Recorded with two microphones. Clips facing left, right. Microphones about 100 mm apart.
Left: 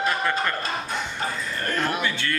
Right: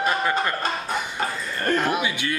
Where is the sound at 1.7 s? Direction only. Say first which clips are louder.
Even; 10° right (ahead or behind).